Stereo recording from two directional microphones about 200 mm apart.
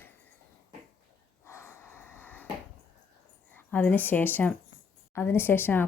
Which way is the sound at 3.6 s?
10° left (ahead or behind).